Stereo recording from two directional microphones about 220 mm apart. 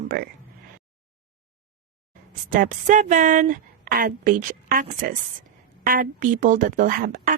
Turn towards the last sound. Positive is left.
turn(degrees=-40)  # may be behind; listen again after turning